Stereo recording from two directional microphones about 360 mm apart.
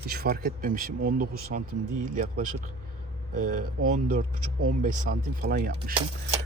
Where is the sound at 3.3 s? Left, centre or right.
Right.